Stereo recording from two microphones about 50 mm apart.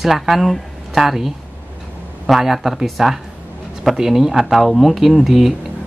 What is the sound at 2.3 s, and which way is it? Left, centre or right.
Speech, centre.